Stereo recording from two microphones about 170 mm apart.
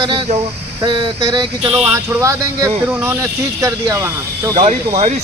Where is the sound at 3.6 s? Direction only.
20° right (ahead or behind).